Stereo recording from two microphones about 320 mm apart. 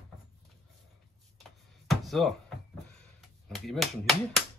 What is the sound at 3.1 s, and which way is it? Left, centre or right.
Speech, centre.